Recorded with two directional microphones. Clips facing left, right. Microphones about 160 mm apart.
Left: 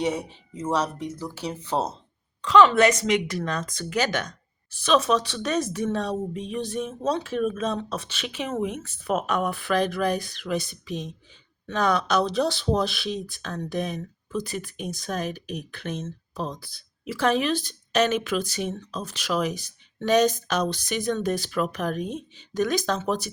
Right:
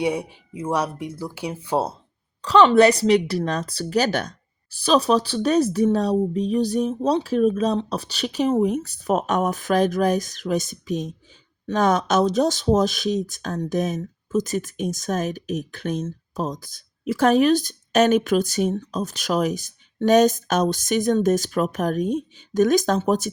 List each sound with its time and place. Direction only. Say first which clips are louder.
0.0 s speech: right 3 dB; 10° right (ahead or behind)
2.4 s speech: right 3 dB; 35° right (ahead or behind)